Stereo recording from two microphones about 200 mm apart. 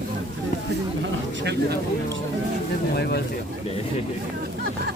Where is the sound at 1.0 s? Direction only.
60° right (ahead or behind).